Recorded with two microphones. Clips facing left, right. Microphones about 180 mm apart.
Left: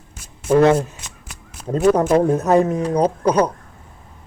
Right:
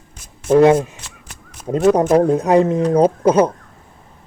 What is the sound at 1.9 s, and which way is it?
Speech, 15° right (ahead or behind).